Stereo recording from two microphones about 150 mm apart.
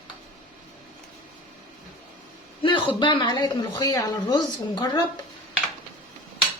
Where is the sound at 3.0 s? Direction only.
30° left (ahead or behind).